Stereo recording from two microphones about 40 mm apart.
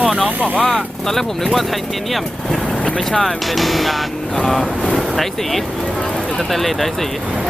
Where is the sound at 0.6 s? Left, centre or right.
Centre.